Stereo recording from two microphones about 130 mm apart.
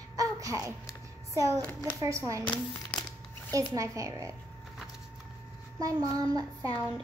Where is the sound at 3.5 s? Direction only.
25° right (ahead or behind).